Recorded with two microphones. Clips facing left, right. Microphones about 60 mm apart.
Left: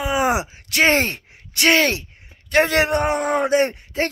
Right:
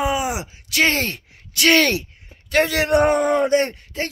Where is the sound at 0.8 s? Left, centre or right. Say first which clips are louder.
Left 2 dB; left.